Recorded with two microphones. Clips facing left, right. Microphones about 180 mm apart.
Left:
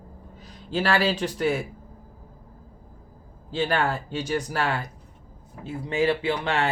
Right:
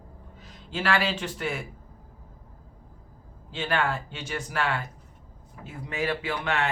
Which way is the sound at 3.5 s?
35° left (ahead or behind).